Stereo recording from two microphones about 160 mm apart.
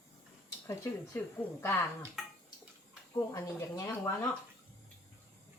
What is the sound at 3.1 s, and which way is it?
Speech, 20° left (ahead or behind).